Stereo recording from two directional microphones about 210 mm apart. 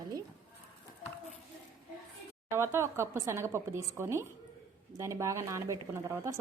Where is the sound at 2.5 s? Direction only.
15° right (ahead or behind).